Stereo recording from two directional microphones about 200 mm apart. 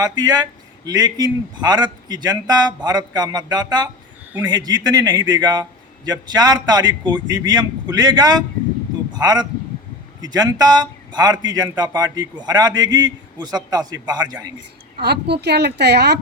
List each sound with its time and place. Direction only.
0.0 s a man's voice: 20° right (ahead or behind)
14.9 s a woman's voice: 55° right (ahead or behind)